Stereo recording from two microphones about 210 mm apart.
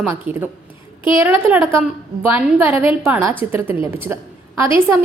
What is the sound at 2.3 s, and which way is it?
A woman's voice, 10° right (ahead or behind).